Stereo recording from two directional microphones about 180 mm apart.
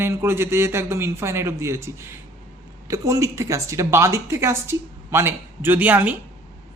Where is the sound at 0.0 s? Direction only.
15° right (ahead or behind).